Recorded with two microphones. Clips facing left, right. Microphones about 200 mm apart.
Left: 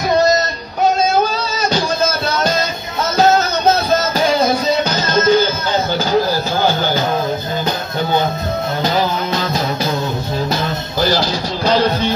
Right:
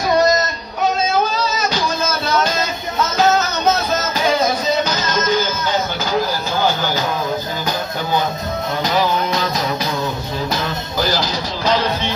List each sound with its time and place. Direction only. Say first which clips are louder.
1.6 s music: left 3 dB; 30° left (ahead or behind)
7.6 s music: left 3 dB; 25° left (ahead or behind)
11.1 s music: left 6 dB; 30° left (ahead or behind)